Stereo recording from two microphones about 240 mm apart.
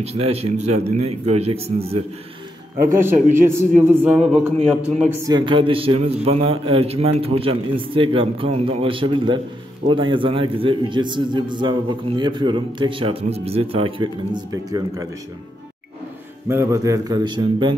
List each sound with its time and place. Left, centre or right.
0.0 s a man's voice: right
2.8 s a man's voice: centre
5.2 s a man's voice: centre
16.4 s a man's voice: centre